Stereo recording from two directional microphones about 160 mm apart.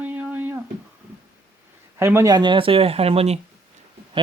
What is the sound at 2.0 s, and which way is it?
Speech, 15° right (ahead or behind).